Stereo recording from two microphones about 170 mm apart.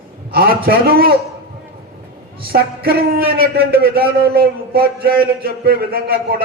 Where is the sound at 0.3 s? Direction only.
65° right (ahead or behind).